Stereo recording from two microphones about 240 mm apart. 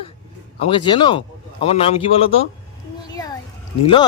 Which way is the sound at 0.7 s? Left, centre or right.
Centre.